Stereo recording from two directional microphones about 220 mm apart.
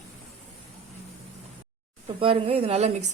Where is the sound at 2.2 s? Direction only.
25° right (ahead or behind).